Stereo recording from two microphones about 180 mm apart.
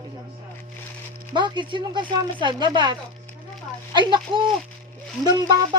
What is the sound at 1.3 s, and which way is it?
Speech, 25° right (ahead or behind).